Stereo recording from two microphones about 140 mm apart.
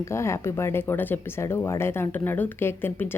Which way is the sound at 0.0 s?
20° left (ahead or behind).